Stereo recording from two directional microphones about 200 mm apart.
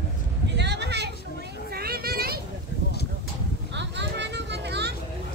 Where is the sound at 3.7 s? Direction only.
60° right (ahead or behind).